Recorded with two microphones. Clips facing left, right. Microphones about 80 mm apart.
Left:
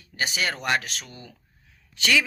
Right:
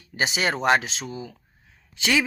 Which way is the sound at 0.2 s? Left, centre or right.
Right.